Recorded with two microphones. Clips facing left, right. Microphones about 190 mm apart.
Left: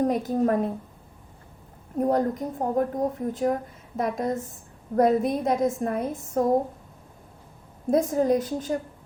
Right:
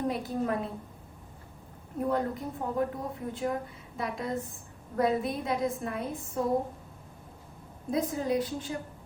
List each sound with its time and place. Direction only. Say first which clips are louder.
0.1 s a woman's voice: left 7 dB; 45° left (ahead or behind)
2.0 s a woman's voice: left 6 dB; 40° left (ahead or behind)
7.9 s a woman's voice: left 8 dB; 45° left (ahead or behind)